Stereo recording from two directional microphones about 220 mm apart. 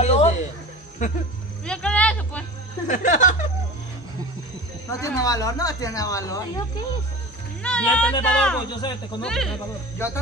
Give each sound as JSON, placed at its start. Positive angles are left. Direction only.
{"t": 0.0, "sound": "a sound", "side_deg": 30}
{"t": 1.0, "sound": "speech", "side_deg": 35}
{"t": 1.7, "sound": "a sound", "side_deg": 5}
{"t": 2.9, "sound": "speech", "side_deg": 35}
{"t": 5.0, "sound": "speech", "side_deg": 15}
{"t": 7.6, "sound": "speech", "side_deg": 5}